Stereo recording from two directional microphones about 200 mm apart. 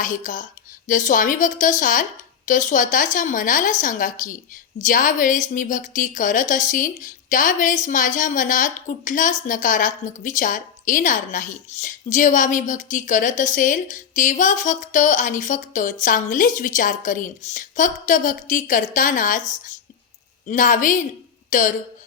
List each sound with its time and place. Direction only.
0.0 s a woman's voice: 40° left (ahead or behind)